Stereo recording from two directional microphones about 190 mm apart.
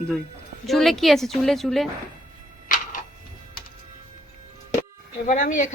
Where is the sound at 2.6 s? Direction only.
45° left (ahead or behind).